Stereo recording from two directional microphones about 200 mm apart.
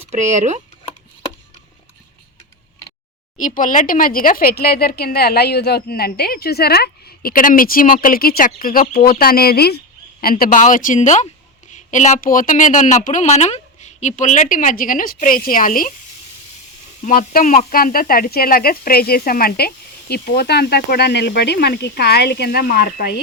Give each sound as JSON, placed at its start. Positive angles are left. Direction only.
{"t": 0.1, "sound": "speech", "side_deg": -35}
{"t": 3.3, "sound": "speech", "side_deg": 40}
{"t": 17.0, "sound": "speech", "side_deg": 45}